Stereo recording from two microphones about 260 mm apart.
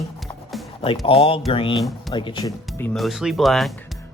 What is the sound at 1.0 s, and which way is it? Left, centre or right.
Speech, left.